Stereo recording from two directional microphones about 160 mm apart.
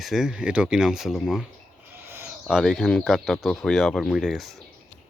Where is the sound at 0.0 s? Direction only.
Centre (ahead or behind).